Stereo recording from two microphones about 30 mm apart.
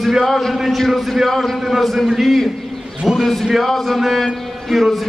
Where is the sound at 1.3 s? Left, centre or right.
Centre.